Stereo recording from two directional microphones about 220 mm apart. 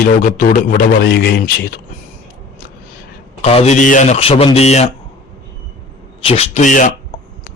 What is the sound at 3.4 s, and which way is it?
Speech, 30° left (ahead or behind).